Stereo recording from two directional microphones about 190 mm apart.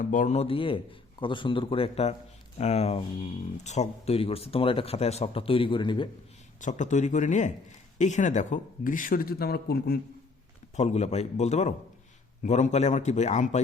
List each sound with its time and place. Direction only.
0.0 s a man's voice: 45° left (ahead or behind); by 6.1 s 25° left (ahead or behind)
6.6 s speech: 40° left (ahead or behind)
10.8 s speech: 35° left (ahead or behind)